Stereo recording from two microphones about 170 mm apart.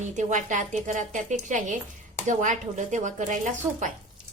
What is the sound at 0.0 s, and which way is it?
A woman's voice, 45° right (ahead or behind).